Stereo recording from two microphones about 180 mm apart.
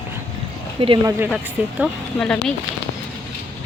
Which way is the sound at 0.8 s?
30° right (ahead or behind).